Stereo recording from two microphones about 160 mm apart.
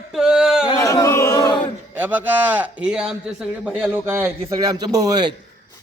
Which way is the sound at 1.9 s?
10° right (ahead or behind).